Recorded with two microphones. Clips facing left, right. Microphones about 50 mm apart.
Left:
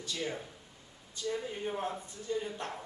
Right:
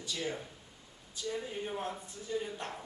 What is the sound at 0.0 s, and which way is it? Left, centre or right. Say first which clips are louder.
Speech: even; centre.